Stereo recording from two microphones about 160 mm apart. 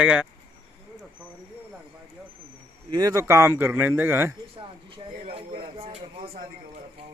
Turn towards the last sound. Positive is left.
turn(degrees=-35)  # may be behind; listen again after turning